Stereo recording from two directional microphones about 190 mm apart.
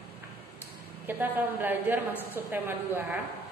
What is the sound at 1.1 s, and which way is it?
A woman's voice, 10° right (ahead or behind).